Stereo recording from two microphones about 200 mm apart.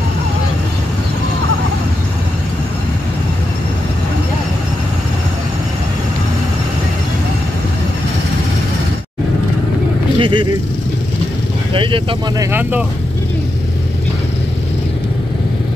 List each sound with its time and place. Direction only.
10.1 s vehicle: 25° right (ahead or behind)
11.7 s speech: 25° right (ahead or behind)
12.4 s speech: 10° right (ahead or behind)